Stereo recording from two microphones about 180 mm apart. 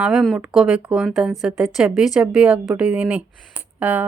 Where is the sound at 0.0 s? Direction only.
5° right (ahead or behind).